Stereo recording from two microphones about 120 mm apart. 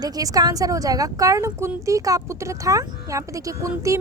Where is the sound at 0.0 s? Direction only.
30° right (ahead or behind).